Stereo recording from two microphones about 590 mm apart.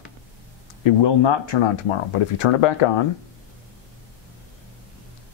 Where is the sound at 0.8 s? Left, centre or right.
Left.